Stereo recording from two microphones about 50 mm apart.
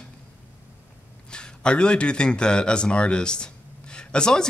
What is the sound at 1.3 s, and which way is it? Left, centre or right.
Speech, centre.